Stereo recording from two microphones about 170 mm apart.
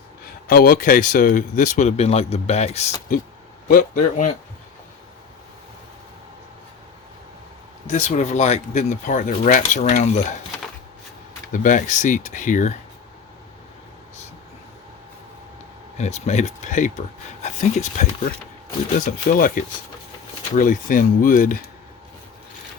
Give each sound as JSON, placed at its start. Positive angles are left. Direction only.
{"t": 0.4, "sound": "speech", "side_deg": 60}
{"t": 3.7, "sound": "speech", "side_deg": 50}
{"t": 7.9, "sound": "speech", "side_deg": 45}
{"t": 11.5, "sound": "speech", "side_deg": 50}
{"t": 16.0, "sound": "speech", "side_deg": 40}